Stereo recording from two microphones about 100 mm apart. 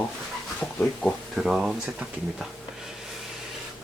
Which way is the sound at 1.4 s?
5° right (ahead or behind).